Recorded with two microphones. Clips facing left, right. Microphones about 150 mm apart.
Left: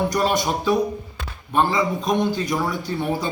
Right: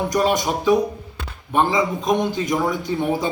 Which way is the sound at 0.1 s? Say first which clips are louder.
Right 2 dB; 15° right (ahead or behind).